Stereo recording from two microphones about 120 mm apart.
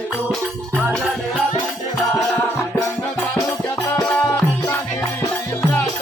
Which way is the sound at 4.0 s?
10° left (ahead or behind).